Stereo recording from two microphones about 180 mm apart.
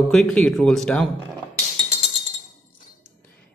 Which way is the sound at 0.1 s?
5° left (ahead or behind).